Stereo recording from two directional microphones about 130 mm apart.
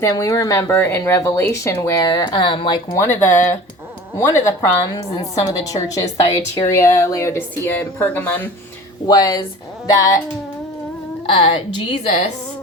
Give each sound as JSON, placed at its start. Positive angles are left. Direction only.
{"t": 0.0, "sound": "speech", "side_deg": 25}
{"t": 2.0, "sound": "speech", "side_deg": 35}
{"t": 3.0, "sound": "speech", "side_deg": 20}
{"t": 9.0, "sound": "speech", "side_deg": 30}
{"t": 11.3, "sound": "a woman's voice", "side_deg": 45}